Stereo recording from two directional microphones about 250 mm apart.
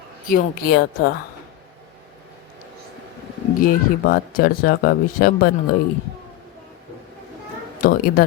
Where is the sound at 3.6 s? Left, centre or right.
Left.